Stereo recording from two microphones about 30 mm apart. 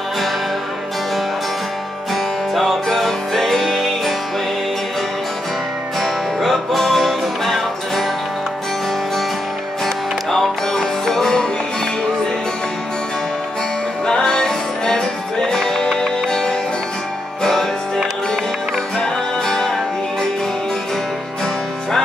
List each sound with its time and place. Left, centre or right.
2.5 s music: centre
5.9 s music: centre
10.3 s music: centre
14.0 s music: left
17.4 s music: centre
18.9 s music: centre